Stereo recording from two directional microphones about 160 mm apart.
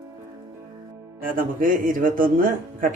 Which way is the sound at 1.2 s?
60° right (ahead or behind).